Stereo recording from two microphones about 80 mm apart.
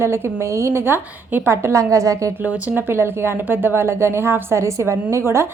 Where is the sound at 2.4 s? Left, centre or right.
Right.